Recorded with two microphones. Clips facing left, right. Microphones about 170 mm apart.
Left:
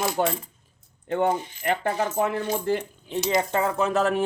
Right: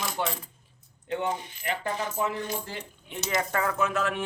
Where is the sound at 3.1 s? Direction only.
30° left (ahead or behind).